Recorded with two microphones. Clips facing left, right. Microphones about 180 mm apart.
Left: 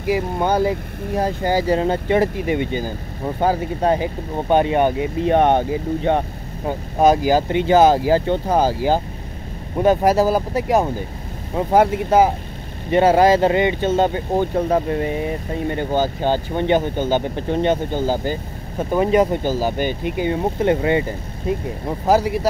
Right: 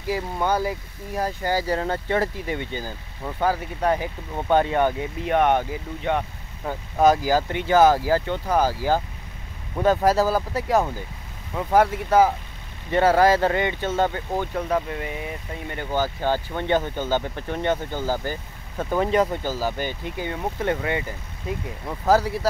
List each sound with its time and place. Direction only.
0.0 s speech: 20° left (ahead or behind)
22.0 s speech: 15° left (ahead or behind)